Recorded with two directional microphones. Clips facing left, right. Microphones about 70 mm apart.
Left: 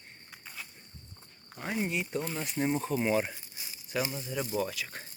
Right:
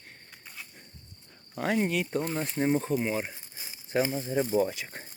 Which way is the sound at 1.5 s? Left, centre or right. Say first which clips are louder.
Right 6 dB; right.